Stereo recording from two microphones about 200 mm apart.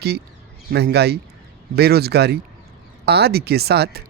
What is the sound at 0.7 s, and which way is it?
A man's voice, 55° right (ahead or behind).